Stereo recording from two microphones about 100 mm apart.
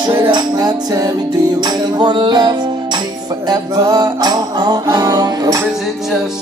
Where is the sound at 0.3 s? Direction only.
40° right (ahead or behind).